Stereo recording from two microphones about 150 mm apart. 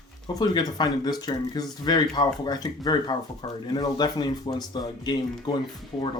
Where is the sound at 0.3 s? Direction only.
25° left (ahead or behind).